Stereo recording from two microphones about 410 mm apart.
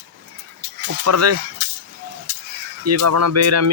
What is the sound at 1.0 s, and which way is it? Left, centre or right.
Speech, right.